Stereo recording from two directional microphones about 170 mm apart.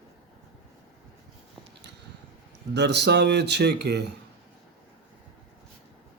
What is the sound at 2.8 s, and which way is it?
Speech, 90° right.